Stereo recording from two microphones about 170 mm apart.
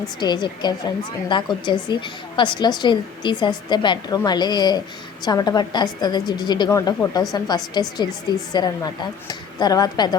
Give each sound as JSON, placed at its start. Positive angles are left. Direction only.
{"t": 0.2, "sound": "a woman's voice", "side_deg": 25}